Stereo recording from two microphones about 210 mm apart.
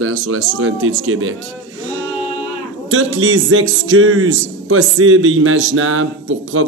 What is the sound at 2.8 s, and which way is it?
A man's voice, 70° right (ahead or behind).